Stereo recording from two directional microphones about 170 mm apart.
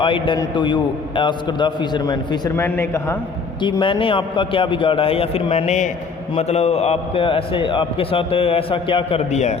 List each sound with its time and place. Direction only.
0.0 s a man's voice: 30° left (ahead or behind); by 3.2 s 15° left (ahead or behind)
3.6 s a man's voice: 25° left (ahead or behind); by 9.6 s 45° left (ahead or behind)